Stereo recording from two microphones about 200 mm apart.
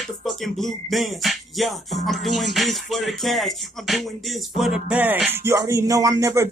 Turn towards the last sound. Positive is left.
turn(degrees=-15)  # may be behind; listen again after turning